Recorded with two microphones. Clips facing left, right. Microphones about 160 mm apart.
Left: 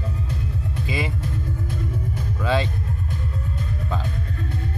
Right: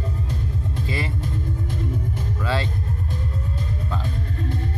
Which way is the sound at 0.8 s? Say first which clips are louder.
Left 2 dB; 15° left (ahead or behind).